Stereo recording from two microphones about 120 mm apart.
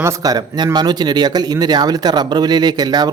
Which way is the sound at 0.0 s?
30° right (ahead or behind).